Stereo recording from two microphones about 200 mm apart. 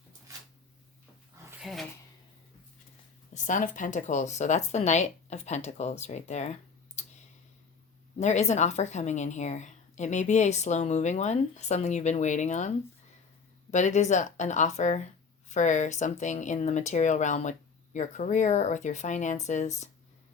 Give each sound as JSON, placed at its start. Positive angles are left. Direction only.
{"t": 1.6, "sound": "speech", "side_deg": 0}
{"t": 3.3, "sound": "a woman's voice", "side_deg": 40}
{"t": 8.2, "sound": "a woman's voice", "side_deg": 35}